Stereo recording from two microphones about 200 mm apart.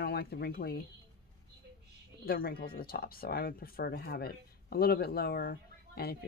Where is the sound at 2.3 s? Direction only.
50° left (ahead or behind).